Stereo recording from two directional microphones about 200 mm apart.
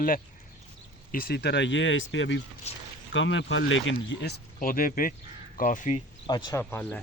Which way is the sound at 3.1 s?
70° left (ahead or behind).